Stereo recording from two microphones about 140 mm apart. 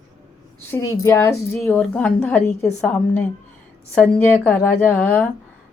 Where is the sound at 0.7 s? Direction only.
20° left (ahead or behind).